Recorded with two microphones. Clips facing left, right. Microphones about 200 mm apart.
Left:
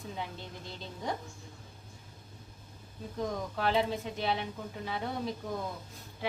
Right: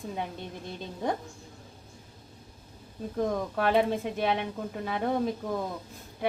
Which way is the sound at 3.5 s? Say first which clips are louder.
Right 4 dB; 55° right (ahead or behind).